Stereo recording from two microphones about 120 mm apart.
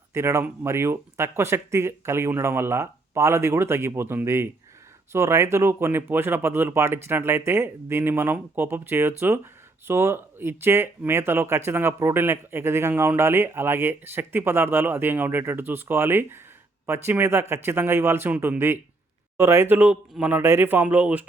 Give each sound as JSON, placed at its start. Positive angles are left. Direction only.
{"t": 0.1, "sound": "speech", "side_deg": -20}